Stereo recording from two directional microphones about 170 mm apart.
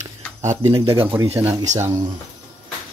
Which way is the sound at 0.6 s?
20° right (ahead or behind).